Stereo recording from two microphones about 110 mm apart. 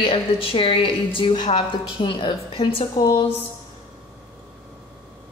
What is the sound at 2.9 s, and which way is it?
Speech, 35° left (ahead or behind).